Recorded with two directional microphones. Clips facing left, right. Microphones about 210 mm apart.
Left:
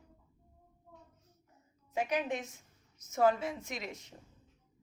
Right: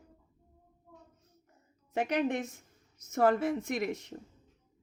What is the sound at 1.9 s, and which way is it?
A woman's voice, 65° right (ahead or behind).